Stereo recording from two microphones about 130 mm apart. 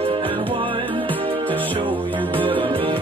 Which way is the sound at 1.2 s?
40° right (ahead or behind).